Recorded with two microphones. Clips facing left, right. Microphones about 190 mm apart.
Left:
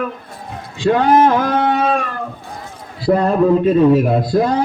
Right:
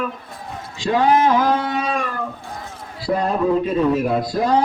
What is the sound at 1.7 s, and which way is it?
Music, 50° left (ahead or behind).